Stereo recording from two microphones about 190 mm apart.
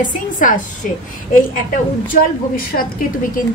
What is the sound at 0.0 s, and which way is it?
Speech, 45° left (ahead or behind).